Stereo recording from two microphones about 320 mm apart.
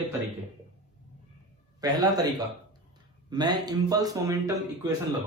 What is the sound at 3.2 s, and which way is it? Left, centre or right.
A man's voice, centre.